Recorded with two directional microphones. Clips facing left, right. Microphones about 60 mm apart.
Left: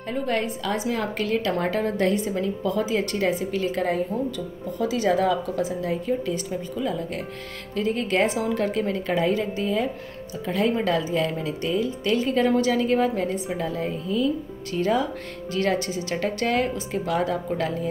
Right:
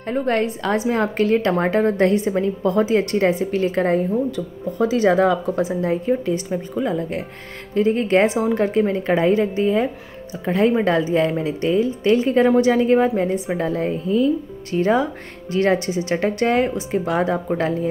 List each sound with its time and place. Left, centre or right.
0.1 s a woman's voice: right
13.5 s a woman's voice: right